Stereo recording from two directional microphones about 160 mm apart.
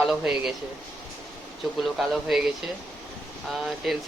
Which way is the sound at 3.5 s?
Centre (ahead or behind).